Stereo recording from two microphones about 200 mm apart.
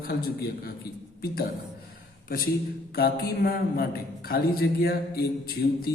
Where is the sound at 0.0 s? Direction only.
50° left (ahead or behind).